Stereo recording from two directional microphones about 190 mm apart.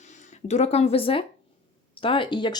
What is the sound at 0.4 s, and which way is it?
Speech, 35° left (ahead or behind).